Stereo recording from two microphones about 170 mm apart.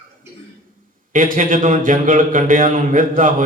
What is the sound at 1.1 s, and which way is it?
Speech, 55° right (ahead or behind).